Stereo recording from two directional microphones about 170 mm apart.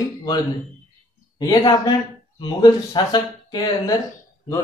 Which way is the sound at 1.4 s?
25° left (ahead or behind).